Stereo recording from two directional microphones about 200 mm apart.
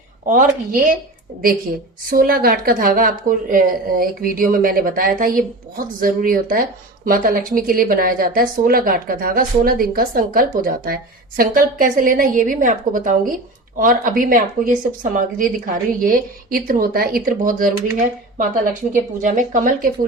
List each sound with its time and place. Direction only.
0.3 s a woman's voice: 40° right (ahead or behind)
2.0 s a woman's voice: 45° right (ahead or behind)